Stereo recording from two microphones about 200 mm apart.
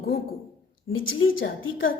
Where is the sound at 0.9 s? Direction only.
75° left (ahead or behind).